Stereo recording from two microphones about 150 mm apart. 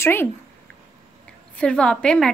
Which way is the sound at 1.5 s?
5° left (ahead or behind).